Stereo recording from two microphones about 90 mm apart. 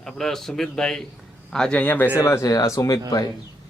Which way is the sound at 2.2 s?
35° left (ahead or behind).